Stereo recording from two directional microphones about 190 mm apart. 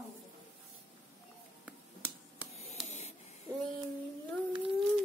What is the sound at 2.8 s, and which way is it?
Spray, 35° left (ahead or behind).